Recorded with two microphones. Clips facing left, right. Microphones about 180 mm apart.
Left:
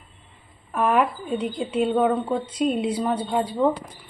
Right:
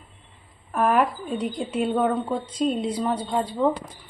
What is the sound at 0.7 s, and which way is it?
A woman's voice, centre (ahead or behind).